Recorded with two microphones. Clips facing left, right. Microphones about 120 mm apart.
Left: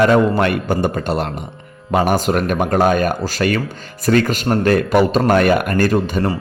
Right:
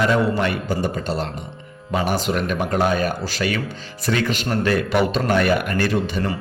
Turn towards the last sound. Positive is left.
turn(degrees=45)  # may be behind; listen again after turning